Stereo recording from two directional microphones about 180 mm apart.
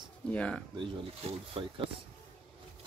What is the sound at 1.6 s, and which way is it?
Speech, 30° right (ahead or behind).